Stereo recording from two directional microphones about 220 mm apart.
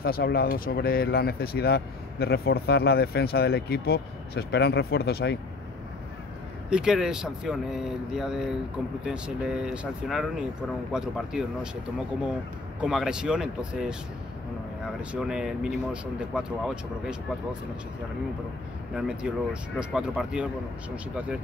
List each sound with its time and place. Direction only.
0.0 s speech: 45° left (ahead or behind)
6.7 s speech: 5° right (ahead or behind)
12.8 s speech: 5° right (ahead or behind)
15.0 s speech: 5° right (ahead or behind)
18.9 s speech: 5° right (ahead or behind)